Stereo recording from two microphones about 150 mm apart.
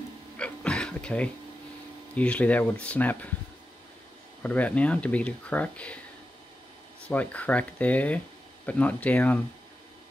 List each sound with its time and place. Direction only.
0.4 s a sound: 5° left (ahead or behind)
2.1 s speech: 10° left (ahead or behind)
4.4 s speech: 10° left (ahead or behind)
7.1 s speech: 10° left (ahead or behind)